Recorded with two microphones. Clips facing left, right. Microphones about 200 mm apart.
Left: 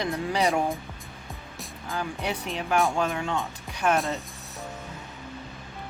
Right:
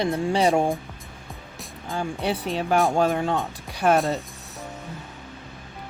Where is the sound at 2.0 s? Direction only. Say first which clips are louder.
Right 4 dB; 30° right (ahead or behind).